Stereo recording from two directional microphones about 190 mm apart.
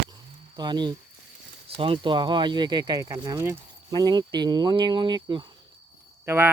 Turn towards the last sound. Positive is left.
turn(degrees=-10)  # may be behind; listen again after turning